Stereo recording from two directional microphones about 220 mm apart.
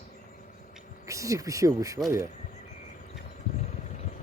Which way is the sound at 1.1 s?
15° right (ahead or behind).